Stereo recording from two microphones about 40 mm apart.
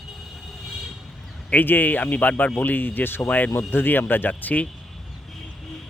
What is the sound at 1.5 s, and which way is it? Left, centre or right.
Speech, left.